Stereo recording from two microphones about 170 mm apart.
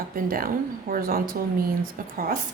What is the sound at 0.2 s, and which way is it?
A woman's voice, 55° right (ahead or behind).